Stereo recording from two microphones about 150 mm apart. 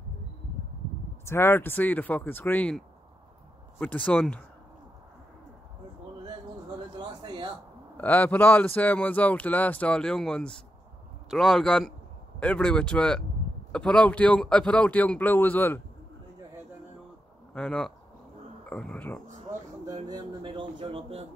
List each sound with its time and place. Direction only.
1.2 s speech: 15° left (ahead or behind)
7.0 s a sound: 30° right (ahead or behind)
8.0 s speech: 10° left (ahead or behind)
17.6 s speech: 5° left (ahead or behind)
20.1 s speech: 30° right (ahead or behind)